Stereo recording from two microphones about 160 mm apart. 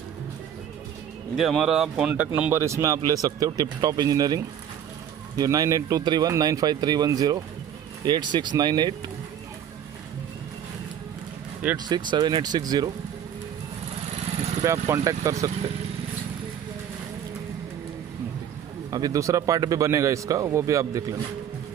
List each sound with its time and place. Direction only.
1.3 s speech: centre (ahead or behind); by 4.4 s 25° right (ahead or behind)
5.4 s speech: 20° right (ahead or behind)
11.7 s speech: 25° right (ahead or behind)
14.6 s speech: 20° right (ahead or behind)
18.9 s speech: 20° right (ahead or behind)